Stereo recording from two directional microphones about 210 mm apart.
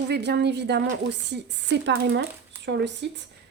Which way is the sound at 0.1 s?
55° right (ahead or behind).